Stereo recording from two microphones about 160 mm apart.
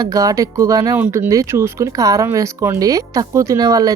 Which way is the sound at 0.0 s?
20° right (ahead or behind).